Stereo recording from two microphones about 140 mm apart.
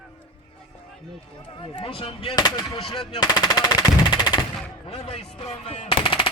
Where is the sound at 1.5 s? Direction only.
40° left (ahead or behind).